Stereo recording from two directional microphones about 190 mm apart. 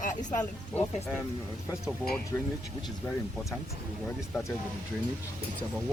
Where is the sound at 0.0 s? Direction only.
40° left (ahead or behind).